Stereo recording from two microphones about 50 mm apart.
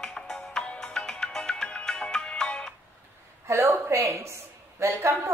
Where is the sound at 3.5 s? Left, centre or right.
Right.